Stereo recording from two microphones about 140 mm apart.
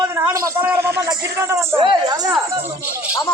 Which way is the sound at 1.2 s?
20° right (ahead or behind).